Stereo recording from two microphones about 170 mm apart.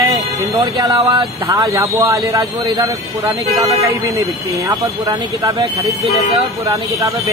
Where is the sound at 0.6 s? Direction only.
30° right (ahead or behind).